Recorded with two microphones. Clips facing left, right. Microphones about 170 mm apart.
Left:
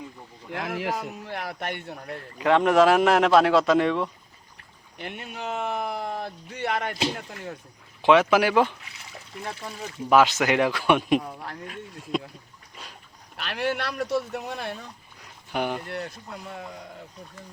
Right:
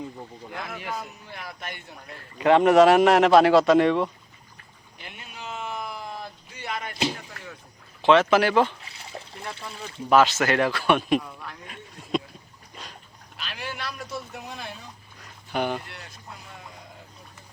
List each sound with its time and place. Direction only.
0.5 s speech: 80° left; by 2.0 s 65° left (ahead or behind)
2.4 s a man's voice: centre (ahead or behind)
4.9 s speech: 60° left (ahead or behind)
7.2 s speech: 45° left (ahead or behind)
8.0 s speech: 10° left (ahead or behind)
8.8 s trickle: 30° right (ahead or behind)
10.1 s speech: 15° left (ahead or behind)
11.2 s speech: 30° left (ahead or behind)
12.1 s rowboat: 5° left (ahead or behind)
12.8 s dog: 5° left (ahead or behind)
13.3 s speech: 65° left (ahead or behind)
15.2 s dog: 10° left (ahead or behind)
15.9 s speech: 55° left (ahead or behind)